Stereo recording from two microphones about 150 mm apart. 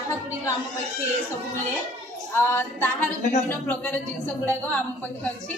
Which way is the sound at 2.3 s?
15° left (ahead or behind).